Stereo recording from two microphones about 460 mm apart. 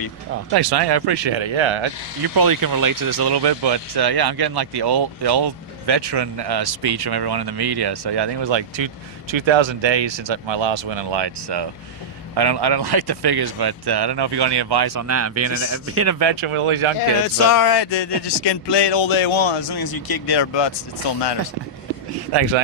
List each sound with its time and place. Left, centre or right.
0.5 s speech: right
2.3 s speech: right
15.0 s a man's voice: right
16.1 s speech: right
17.5 s speech: left
22.3 s speech: right